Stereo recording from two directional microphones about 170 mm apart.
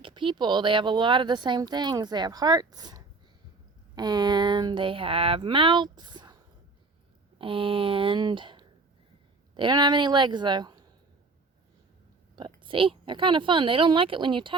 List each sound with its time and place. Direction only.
0.0 s speech: 30° right (ahead or behind)
12.4 s speech: 30° right (ahead or behind)